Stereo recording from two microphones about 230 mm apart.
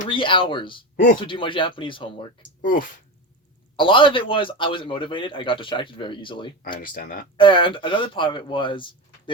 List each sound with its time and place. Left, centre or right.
0.1 s a man's voice: left
2.6 s speech: left
3.8 s a man's voice: left
6.7 s speech: left
7.3 s a man's voice: left